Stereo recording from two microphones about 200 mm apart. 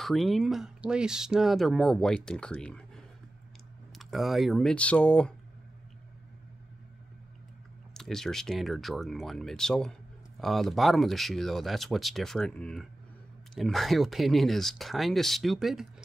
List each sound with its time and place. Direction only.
0.0 s speech: centre (ahead or behind)
7.9 s speech: centre (ahead or behind)